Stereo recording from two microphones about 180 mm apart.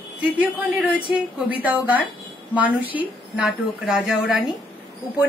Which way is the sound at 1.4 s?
10° right (ahead or behind).